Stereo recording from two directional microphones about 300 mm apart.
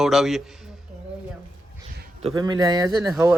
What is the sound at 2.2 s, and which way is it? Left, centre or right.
Speech, centre.